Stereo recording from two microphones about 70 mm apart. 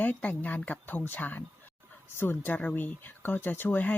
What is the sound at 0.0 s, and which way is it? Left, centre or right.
Speech, left.